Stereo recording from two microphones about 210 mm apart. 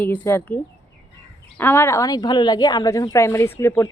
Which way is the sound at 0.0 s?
10° left (ahead or behind).